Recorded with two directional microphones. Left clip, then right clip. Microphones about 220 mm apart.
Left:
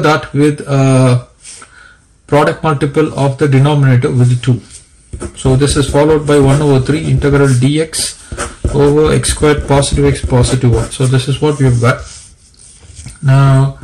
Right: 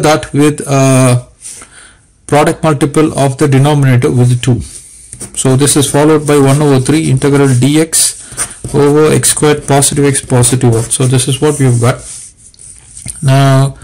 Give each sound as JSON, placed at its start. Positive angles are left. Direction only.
{"t": 0.0, "sound": "a man's voice", "side_deg": -35}
{"t": 2.2, "sound": "a man's voice", "side_deg": -35}
{"t": 13.0, "sound": "speech", "side_deg": -40}